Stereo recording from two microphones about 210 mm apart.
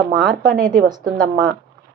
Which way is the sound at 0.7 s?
20° right (ahead or behind).